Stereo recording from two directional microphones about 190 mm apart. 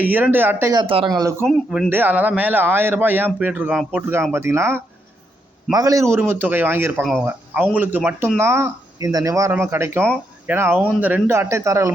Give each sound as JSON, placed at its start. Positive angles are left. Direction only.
{"t": 0.0, "sound": "speech", "side_deg": -10}
{"t": 1.5, "sound": "speech", "side_deg": 5}
{"t": 1.9, "sound": "a man's voice", "side_deg": -10}